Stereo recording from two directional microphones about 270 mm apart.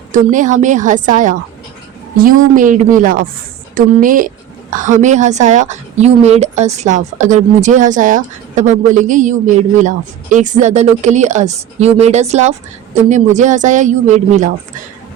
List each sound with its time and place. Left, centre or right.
0.1 s a woman's voice: right